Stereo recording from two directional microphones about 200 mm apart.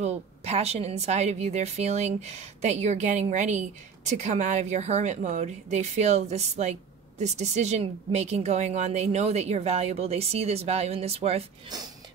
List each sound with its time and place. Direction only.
0.0 s a woman's voice: 30° right (ahead or behind)
11.7 s music: 20° right (ahead or behind)